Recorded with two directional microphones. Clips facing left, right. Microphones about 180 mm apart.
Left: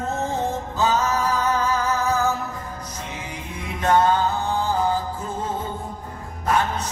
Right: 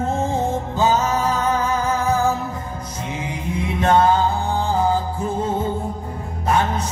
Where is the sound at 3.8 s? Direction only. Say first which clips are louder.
Right 2 dB; 25° right (ahead or behind).